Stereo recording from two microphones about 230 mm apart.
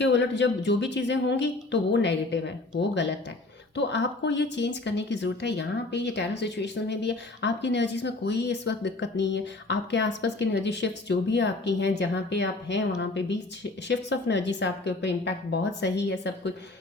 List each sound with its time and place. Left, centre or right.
0.0 s speech: left
3.8 s speech: left